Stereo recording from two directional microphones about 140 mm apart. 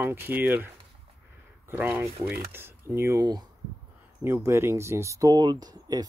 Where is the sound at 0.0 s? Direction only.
15° right (ahead or behind).